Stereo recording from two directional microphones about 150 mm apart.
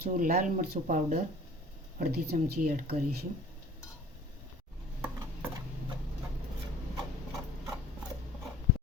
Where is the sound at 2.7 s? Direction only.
80° right.